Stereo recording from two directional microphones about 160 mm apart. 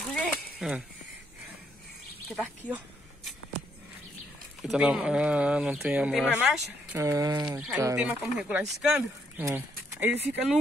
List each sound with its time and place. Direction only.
0.0 s a sound: 5° left (ahead or behind)
4.6 s speech: 5° right (ahead or behind)
7.0 s speech: 20° right (ahead or behind)